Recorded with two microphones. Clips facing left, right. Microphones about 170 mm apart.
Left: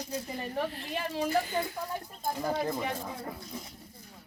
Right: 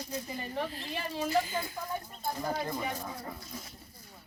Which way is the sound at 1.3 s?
60° left (ahead or behind).